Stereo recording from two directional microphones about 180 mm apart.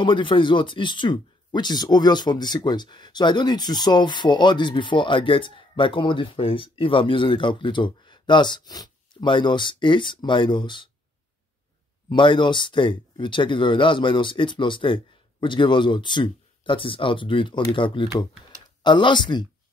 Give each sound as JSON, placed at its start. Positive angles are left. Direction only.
{"t": 0.0, "sound": "speech", "side_deg": 25}
{"t": 12.1, "sound": "speech", "side_deg": 25}